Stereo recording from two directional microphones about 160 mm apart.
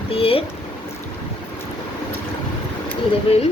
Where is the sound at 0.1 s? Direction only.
35° left (ahead or behind).